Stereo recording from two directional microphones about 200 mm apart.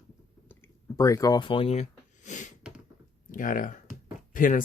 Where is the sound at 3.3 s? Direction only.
45° left (ahead or behind).